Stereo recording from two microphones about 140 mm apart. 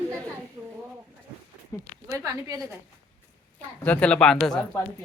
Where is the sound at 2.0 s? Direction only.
20° right (ahead or behind).